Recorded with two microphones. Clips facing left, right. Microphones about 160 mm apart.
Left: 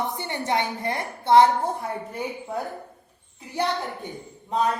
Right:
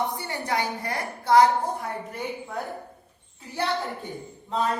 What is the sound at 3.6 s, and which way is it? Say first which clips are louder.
Speech: left 2 dB; 15° left (ahead or behind).